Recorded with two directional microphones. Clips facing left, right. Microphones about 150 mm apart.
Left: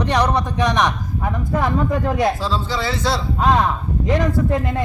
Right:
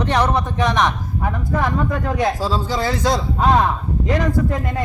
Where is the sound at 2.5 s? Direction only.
45° right (ahead or behind).